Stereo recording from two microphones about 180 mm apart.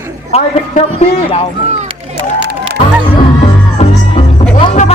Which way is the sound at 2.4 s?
75° right (ahead or behind).